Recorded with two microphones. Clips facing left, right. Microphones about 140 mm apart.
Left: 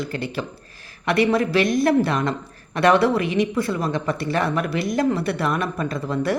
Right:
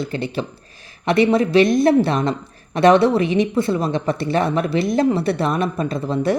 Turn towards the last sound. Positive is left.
turn(degrees=-25)  # may be behind; listen again after turning